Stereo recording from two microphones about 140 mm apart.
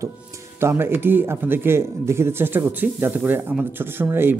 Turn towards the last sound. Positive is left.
turn(degrees=-15)  # may be behind; listen again after turning